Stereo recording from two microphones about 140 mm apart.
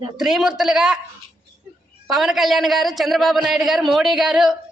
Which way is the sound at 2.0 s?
Centre (ahead or behind).